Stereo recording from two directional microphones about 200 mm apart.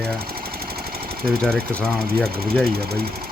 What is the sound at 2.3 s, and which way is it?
Speech, 50° right (ahead or behind).